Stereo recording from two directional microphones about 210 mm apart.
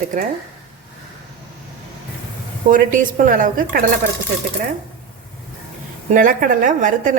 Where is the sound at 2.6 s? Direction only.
40° right (ahead or behind).